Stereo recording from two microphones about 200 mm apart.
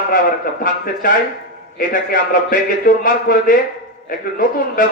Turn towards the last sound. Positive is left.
turn(degrees=45)  # may be behind; listen again after turning